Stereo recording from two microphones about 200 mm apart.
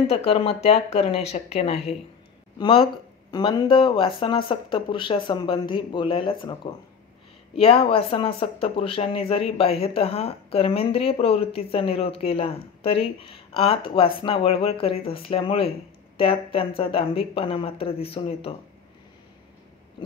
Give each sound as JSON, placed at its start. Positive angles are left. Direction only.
{"t": 0.1, "sound": "speech", "side_deg": 30}
{"t": 3.3, "sound": "speech", "side_deg": 20}